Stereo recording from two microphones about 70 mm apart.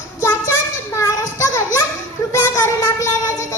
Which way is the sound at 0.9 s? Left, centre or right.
Left.